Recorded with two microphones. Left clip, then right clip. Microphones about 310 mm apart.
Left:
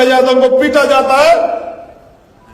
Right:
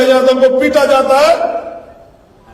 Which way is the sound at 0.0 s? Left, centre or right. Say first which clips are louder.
Even; centre.